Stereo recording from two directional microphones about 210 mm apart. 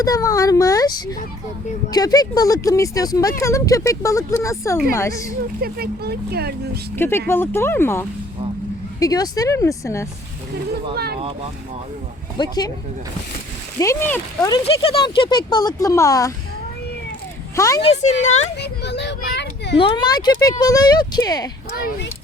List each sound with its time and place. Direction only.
0.0 s speech: 15° left (ahead or behind)
5.6 s speech: 50° right (ahead or behind)
6.9 s speech: 10° left (ahead or behind)
10.9 s speech: 50° right (ahead or behind)
12.4 s speech: 20° left (ahead or behind)
13.7 s speech: 15° left (ahead or behind)
17.5 s speech: 15° left (ahead or behind)
17.8 s speech: 35° left (ahead or behind)
18.6 s a child's voice: 55° left (ahead or behind)
19.8 s speech: 20° left (ahead or behind)